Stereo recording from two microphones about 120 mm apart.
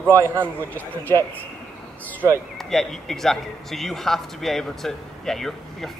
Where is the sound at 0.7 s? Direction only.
15° left (ahead or behind).